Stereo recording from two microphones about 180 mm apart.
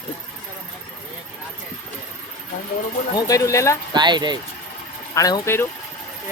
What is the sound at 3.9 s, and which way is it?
Speech, 25° right (ahead or behind).